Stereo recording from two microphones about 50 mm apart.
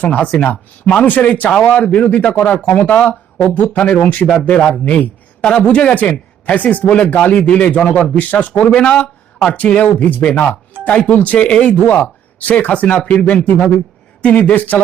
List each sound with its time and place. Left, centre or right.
0.0 s speech: left
1.0 s speech: left
4.5 s a man's voice: centre
8.7 s a man's voice: centre; by 14.8 s left